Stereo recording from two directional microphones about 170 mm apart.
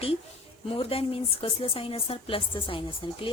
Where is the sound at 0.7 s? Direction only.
35° left (ahead or behind).